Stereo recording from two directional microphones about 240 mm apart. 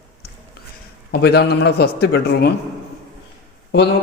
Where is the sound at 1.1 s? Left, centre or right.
Left.